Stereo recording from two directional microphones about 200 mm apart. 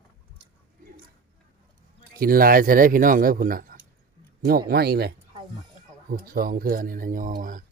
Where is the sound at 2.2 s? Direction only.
45° right (ahead or behind).